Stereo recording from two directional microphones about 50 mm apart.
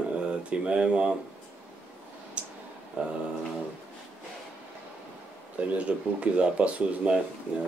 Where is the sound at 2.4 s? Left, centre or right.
Right.